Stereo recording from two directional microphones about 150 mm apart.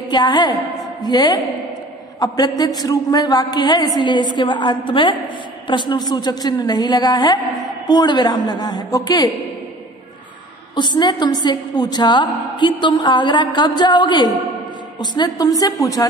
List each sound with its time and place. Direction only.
0.1 s a woman's voice: 30° left (ahead or behind)
10.8 s a woman's voice: 30° left (ahead or behind)